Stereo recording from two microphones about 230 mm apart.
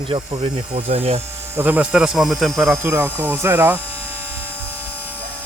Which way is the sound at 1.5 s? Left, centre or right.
Centre.